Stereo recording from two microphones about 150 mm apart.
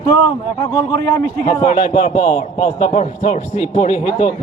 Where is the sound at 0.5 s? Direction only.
25° left (ahead or behind).